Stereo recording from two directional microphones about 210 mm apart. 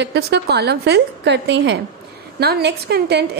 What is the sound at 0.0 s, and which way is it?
A woman's voice, 55° right (ahead or behind).